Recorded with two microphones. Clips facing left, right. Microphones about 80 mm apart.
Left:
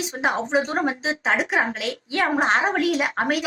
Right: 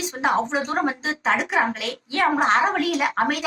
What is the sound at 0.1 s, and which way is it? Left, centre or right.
A woman's voice, centre.